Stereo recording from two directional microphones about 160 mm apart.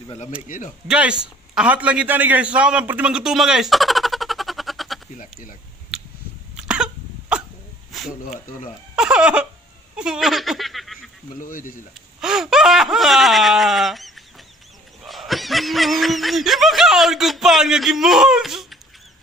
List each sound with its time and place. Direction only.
0.5 s speech: 55° left (ahead or behind)
0.8 s a man's voice: 5° right (ahead or behind)
6.5 s cough: 5° right (ahead or behind)
8.3 s speech: 55° left (ahead or behind)
8.9 s a sound: 5° right (ahead or behind)
11.3 s speech: 60° left (ahead or behind)
12.2 s a sound: 5° right (ahead or behind)
15.0 s snicker: centre (ahead or behind)